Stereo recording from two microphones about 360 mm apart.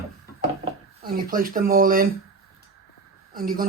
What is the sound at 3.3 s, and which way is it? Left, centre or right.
Speech, right.